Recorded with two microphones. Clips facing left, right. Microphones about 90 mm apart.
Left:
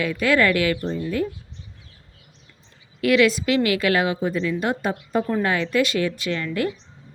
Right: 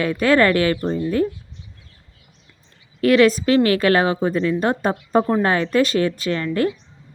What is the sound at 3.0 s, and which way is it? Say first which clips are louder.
A woman's voice: right 4 dB; 40° right (ahead or behind).